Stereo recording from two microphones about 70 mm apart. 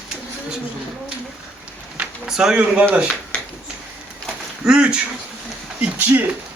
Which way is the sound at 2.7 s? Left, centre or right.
Right.